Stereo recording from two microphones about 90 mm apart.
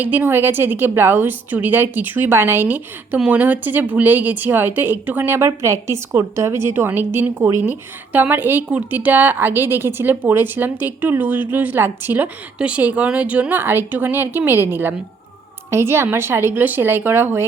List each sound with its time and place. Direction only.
0.0 s a woman's voice: 20° right (ahead or behind)